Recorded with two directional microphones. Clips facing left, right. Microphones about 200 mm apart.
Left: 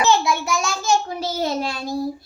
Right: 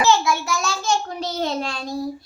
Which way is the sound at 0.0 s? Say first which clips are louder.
Even; 20° left (ahead or behind).